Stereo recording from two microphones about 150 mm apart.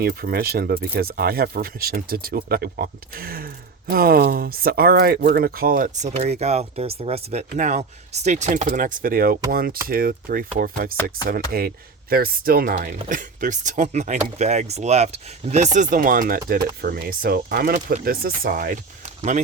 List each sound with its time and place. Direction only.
0.0 s speech: 80° right
11.5 s speech: 90° right; by 16.4 s 65° right (ahead or behind)
16.8 s speech: 80° right
17.7 s speech: 65° right (ahead or behind)
19.0 s a sound: 50° right (ahead or behind)